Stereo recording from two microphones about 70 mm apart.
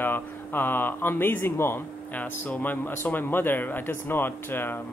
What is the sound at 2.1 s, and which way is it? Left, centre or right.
Speech, left.